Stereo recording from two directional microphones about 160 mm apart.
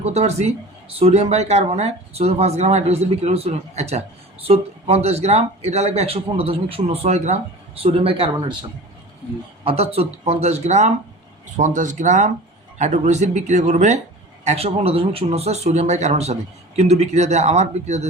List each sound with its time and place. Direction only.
0.0 s speech: 45° right (ahead or behind)
9.6 s speech: 40° right (ahead or behind)